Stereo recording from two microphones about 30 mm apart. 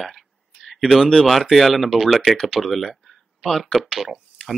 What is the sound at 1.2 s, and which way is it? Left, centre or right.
Speech, centre.